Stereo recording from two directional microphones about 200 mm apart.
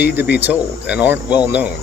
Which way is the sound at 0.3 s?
10° right (ahead or behind).